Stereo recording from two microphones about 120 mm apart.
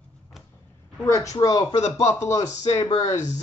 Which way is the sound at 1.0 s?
25° left (ahead or behind).